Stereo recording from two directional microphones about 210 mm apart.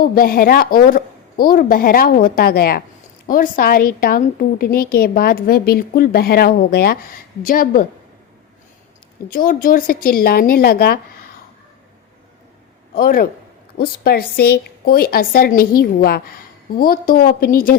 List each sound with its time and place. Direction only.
0.0 s a woman's voice: 45° left (ahead or behind)
9.3 s a woman's voice: 45° left (ahead or behind)
12.9 s a man's voice: 45° left (ahead or behind)